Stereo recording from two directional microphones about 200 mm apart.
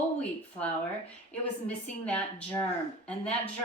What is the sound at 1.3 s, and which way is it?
A woman's voice, 5° left (ahead or behind).